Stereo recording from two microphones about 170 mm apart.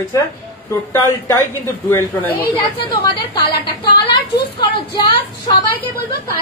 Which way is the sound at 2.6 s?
30° left (ahead or behind).